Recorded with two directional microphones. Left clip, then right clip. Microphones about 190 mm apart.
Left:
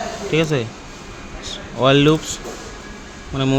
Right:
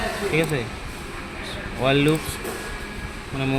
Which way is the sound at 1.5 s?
65° left (ahead or behind).